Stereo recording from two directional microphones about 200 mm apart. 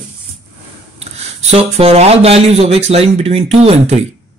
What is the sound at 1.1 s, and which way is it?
Speech, 30° right (ahead or behind).